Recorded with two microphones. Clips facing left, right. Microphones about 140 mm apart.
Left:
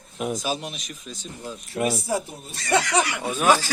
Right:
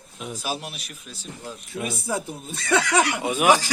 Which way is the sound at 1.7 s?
55° left (ahead or behind).